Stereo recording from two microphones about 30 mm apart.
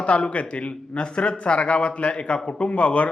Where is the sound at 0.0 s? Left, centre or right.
Left.